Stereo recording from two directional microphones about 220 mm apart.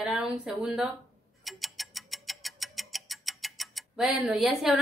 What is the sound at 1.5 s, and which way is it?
Tick-tock, centre (ahead or behind).